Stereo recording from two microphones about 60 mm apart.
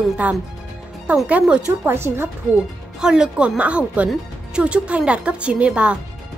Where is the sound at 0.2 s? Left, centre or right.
Right.